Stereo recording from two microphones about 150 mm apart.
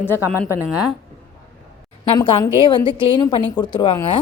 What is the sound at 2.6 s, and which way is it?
A woman's voice, 35° left (ahead or behind).